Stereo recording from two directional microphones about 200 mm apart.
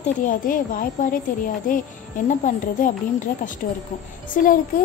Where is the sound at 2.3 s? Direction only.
40° left (ahead or behind).